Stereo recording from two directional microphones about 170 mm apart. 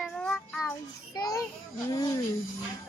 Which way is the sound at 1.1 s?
20° left (ahead or behind).